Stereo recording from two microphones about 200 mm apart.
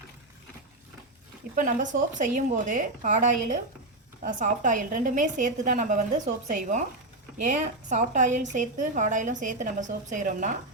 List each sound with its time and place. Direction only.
1.5 s a woman's voice: 40° right (ahead or behind)